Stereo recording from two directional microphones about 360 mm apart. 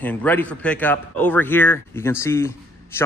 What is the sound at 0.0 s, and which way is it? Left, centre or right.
A man's voice, centre.